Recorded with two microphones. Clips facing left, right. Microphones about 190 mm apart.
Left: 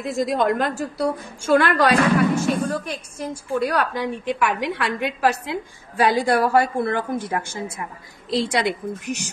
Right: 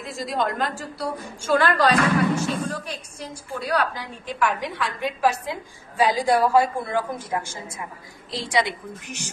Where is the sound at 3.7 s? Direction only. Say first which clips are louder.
Left 2 dB; 55° left (ahead or behind).